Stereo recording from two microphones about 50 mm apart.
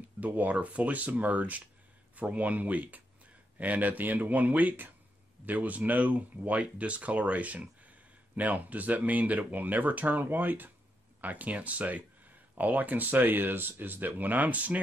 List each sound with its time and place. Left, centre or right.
0.2 s speech: right